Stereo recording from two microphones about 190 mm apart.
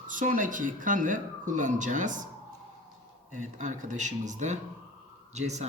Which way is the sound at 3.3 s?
40° right (ahead or behind).